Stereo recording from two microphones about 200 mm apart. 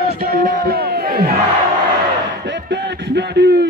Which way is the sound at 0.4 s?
50° right (ahead or behind).